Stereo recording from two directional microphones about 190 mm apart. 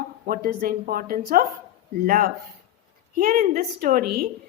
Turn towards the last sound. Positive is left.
turn(degrees=-50)  # may be behind; listen again after turning